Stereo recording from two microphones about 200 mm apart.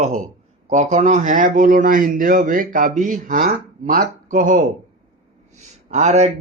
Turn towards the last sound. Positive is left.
turn(degrees=-35)  # may be behind; listen again after turning